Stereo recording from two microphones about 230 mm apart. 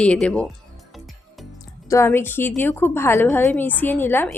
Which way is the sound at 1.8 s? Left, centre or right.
Centre.